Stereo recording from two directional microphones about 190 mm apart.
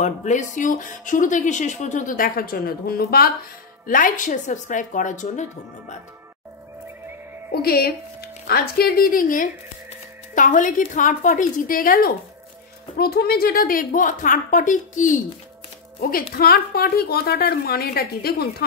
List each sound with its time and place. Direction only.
0.0 s a woman's voice: 40° left (ahead or behind)
7.6 s speech: 55° left (ahead or behind)